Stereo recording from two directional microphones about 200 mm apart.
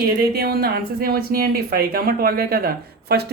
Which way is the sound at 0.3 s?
50° right (ahead or behind).